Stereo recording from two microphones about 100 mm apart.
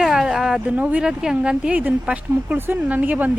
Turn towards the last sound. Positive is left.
turn(degrees=-15)  # may be behind; listen again after turning